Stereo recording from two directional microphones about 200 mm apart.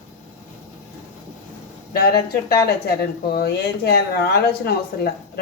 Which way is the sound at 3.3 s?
55° left (ahead or behind).